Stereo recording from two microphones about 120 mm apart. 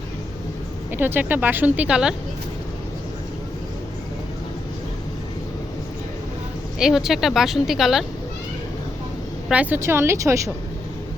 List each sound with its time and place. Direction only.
0.9 s speech: 15° right (ahead or behind)
6.7 s speech: 5° right (ahead or behind)
9.5 s a woman's voice: 15° right (ahead or behind)